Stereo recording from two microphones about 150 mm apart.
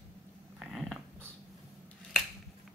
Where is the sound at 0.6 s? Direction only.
Centre (ahead or behind).